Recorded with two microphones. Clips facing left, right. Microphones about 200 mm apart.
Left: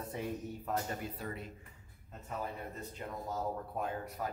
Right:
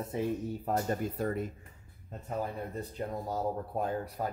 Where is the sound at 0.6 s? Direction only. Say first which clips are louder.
Right 6 dB; 40° right (ahead or behind).